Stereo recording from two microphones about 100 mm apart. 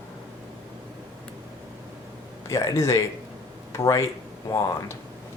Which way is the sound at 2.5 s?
30° left (ahead or behind).